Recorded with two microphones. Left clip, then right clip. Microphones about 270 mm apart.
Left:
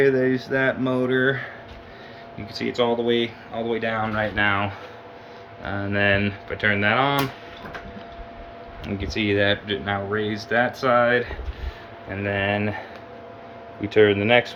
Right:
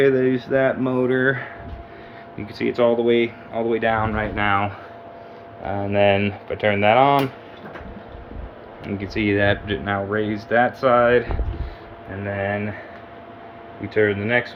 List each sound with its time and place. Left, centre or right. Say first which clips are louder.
0.0 s speech: right 2 dB; centre
2.6 s speech: right 4 dB; centre
5.6 s speech: right 4 dB; centre
9.0 s speech: right 1 dB; centre
12.2 s speech: left 1 dB; centre
13.9 s speech: left 3 dB; centre